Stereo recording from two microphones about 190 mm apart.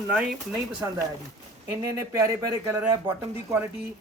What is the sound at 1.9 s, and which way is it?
Speech, 15° right (ahead or behind).